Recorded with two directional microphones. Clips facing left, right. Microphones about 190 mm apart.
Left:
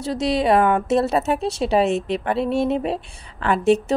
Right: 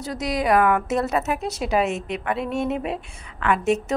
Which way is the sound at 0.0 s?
30° left (ahead or behind).